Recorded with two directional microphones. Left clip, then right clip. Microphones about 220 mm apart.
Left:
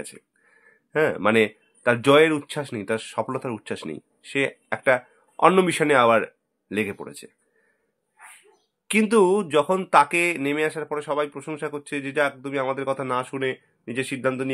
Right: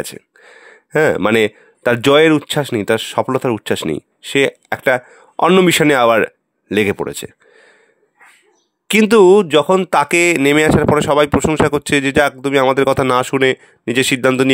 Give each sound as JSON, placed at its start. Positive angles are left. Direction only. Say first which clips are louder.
{"t": 0.0, "sound": "speech", "louder": "right 12 dB", "side_deg": -45}
{"t": 8.8, "sound": "speech", "louder": "right 10 dB", "side_deg": -45}